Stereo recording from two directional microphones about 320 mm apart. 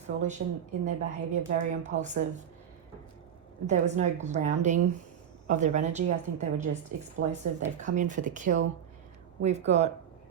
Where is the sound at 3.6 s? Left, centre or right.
Right.